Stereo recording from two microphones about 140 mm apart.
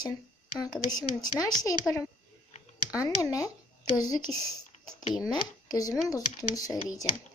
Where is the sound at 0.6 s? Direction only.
30° left (ahead or behind).